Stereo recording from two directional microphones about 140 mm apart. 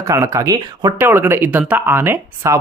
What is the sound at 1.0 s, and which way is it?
Speech, 15° right (ahead or behind).